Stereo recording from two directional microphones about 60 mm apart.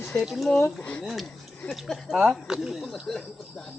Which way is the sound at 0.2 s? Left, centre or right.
Centre.